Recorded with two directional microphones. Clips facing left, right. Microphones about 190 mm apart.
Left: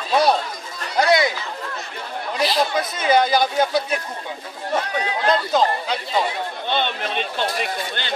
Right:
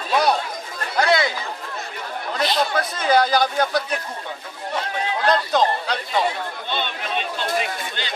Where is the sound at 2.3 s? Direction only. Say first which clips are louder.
Left 1 dB; 5° left (ahead or behind).